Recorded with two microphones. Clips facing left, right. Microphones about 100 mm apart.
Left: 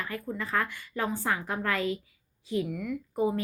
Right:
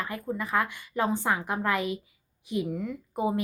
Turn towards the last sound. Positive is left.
turn(degrees=-20)  # may be behind; listen again after turning